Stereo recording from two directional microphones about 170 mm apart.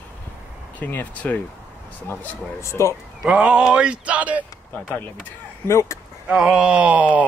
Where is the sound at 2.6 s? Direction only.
15° left (ahead or behind).